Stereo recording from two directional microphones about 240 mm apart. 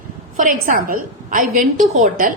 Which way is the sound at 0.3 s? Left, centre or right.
Right.